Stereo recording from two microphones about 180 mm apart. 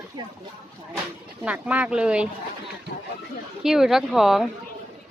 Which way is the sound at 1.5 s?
10° right (ahead or behind).